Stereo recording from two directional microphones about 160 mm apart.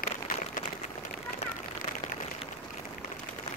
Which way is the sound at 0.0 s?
60° left (ahead or behind).